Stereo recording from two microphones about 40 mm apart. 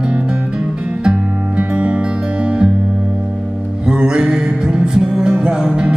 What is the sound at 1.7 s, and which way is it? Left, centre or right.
Music, right.